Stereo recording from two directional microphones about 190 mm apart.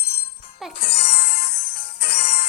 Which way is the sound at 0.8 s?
30° left (ahead or behind).